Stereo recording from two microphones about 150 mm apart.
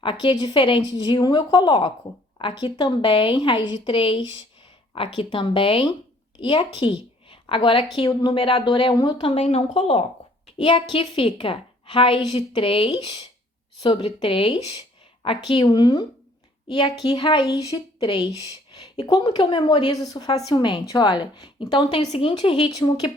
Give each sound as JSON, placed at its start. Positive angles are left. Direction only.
{"t": 0.0, "sound": "a woman's voice", "side_deg": 35}
{"t": 10.6, "sound": "a woman's voice", "side_deg": 30}